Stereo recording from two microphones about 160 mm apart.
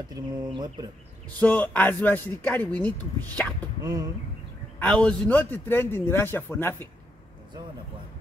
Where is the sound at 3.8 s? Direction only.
25° right (ahead or behind).